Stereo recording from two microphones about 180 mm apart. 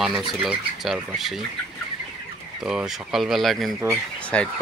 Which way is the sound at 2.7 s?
5° right (ahead or behind).